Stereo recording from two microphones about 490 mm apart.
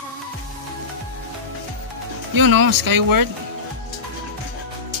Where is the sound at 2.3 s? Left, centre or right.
Right.